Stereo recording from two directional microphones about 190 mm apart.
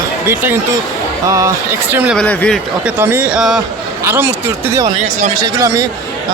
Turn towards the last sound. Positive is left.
turn(degrees=-20)  # may be behind; listen again after turning